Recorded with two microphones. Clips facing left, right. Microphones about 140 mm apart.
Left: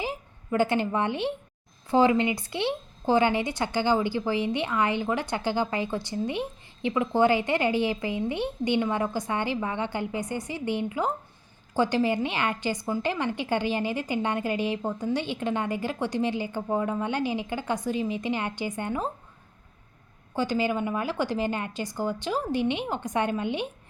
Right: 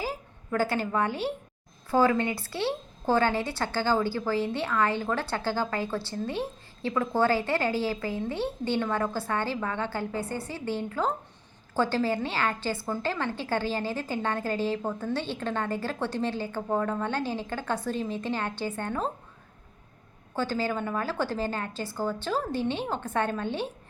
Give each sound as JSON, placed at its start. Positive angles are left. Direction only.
{"t": 0.0, "sound": "a woman's voice", "side_deg": 20}
{"t": 20.3, "sound": "a woman's voice", "side_deg": 15}